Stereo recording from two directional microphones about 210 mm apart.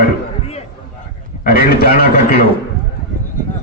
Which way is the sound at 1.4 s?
45° left (ahead or behind).